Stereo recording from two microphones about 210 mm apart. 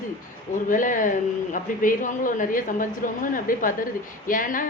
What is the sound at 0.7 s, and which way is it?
Speech, 40° left (ahead or behind).